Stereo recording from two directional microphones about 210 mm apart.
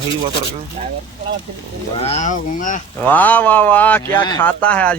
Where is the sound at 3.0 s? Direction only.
10° left (ahead or behind).